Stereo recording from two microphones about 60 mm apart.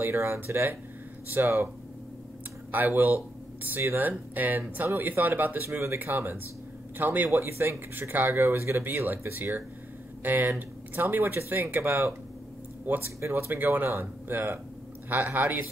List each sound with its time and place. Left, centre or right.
0.0 s speech: right
2.7 s speech: right
4.4 s speech: right
5.7 s speech: right
5.9 s speech: right
13.2 s speech: right